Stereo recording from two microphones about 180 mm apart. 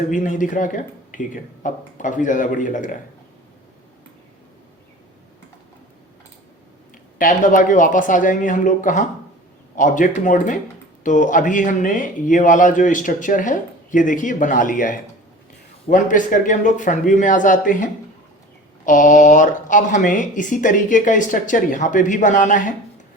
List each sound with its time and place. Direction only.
0.1 s speech: 45° left (ahead or behind)
7.2 s speech: 50° left (ahead or behind)
18.9 s speech: 45° left (ahead or behind)